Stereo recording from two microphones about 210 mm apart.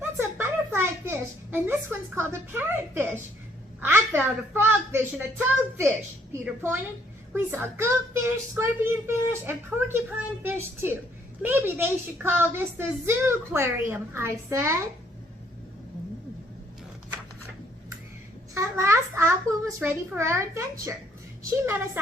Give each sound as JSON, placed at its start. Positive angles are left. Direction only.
{"t": 0.2, "sound": "a sound", "side_deg": -10}
{"t": 3.8, "sound": "a child's voice", "side_deg": -10}
{"t": 18.5, "sound": "a child's voice", "side_deg": -15}